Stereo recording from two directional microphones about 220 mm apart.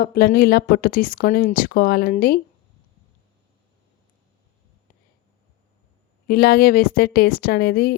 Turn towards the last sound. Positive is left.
turn(degrees=45)  # may be behind; listen again after turning